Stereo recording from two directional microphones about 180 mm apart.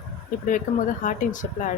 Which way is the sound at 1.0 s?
45° left (ahead or behind).